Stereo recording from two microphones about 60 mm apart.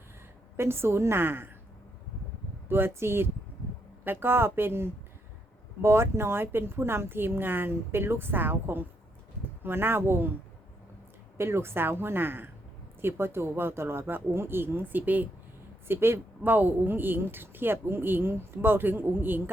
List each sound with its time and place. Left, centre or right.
0.5 s a woman's voice: right
2.6 s speech: right
11.3 s speech: right
15.9 s speech: right
16.5 s speech: right